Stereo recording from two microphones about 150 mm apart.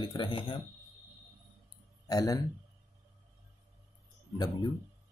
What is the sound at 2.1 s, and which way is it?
Speech, 25° left (ahead or behind).